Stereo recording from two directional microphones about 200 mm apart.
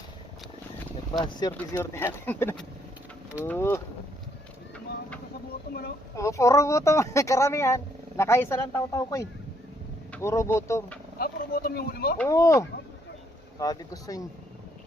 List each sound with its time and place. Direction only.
1.2 s speech: 20° left (ahead or behind)
6.1 s speech: 15° left (ahead or behind)
11.2 s speech: 50° left (ahead or behind)
12.1 s speech: 10° left (ahead or behind)